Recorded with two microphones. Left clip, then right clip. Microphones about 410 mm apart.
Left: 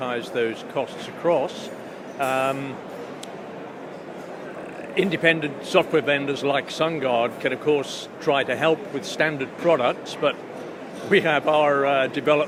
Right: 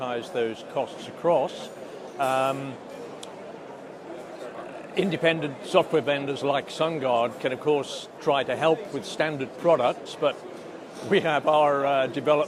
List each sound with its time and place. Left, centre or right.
0.0 s a man's voice: right
4.9 s a man's voice: right